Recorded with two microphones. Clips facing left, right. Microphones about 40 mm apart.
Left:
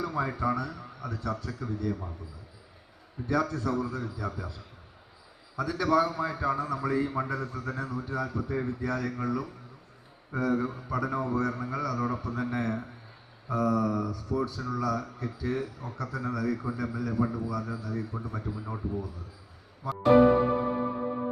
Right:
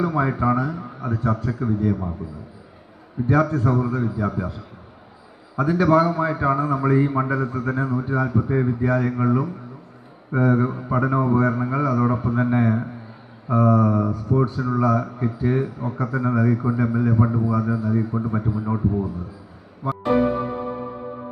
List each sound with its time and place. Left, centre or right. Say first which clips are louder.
0.0 s speech: right 9 dB; right
3.2 s speech: right 9 dB; right
19.8 s music: right 8 dB; right